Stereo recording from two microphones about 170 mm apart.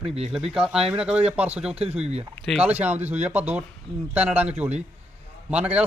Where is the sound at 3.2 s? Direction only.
10° right (ahead or behind).